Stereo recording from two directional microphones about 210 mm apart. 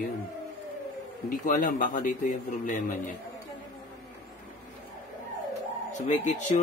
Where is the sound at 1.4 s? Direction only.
40° left (ahead or behind).